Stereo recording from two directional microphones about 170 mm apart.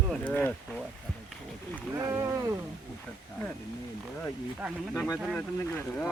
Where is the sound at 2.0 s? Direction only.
20° right (ahead or behind).